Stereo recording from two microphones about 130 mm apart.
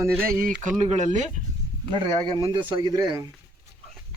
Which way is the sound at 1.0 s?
70° right (ahead or behind).